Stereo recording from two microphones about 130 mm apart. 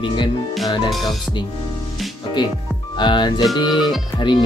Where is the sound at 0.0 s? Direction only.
35° left (ahead or behind).